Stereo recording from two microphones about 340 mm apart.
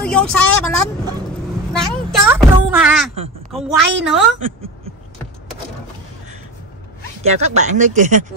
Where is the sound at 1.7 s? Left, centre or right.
Centre.